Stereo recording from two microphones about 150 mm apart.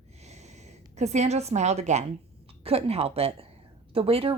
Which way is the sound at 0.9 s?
50° right (ahead or behind).